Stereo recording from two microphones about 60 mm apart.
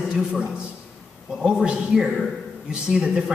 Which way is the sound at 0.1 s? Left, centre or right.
Centre.